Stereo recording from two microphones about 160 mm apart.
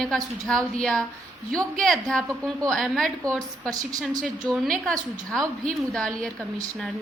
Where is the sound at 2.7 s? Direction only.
Centre (ahead or behind).